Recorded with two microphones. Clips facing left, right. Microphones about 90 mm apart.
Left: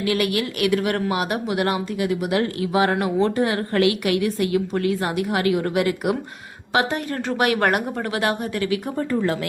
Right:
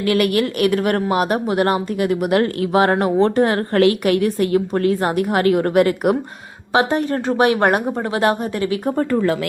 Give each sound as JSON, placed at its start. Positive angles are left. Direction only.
{"t": 0.0, "sound": "speech", "side_deg": -50}
{"t": 6.7, "sound": "speech", "side_deg": -35}